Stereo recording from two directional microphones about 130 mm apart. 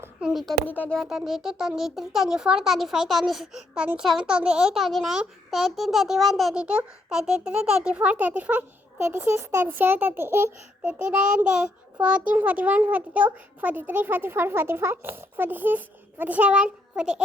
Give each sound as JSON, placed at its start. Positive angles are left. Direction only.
{"t": 0.2, "sound": "a sound", "side_deg": -5}
{"t": 0.7, "sound": "speech", "side_deg": 15}
{"t": 0.9, "sound": "a child's voice", "side_deg": 0}